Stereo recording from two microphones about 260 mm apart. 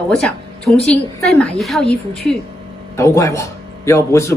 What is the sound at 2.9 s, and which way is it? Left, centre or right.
Speech, centre.